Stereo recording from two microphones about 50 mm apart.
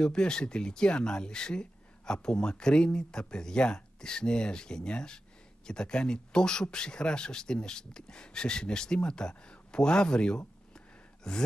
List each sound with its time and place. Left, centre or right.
0.0 s speech: centre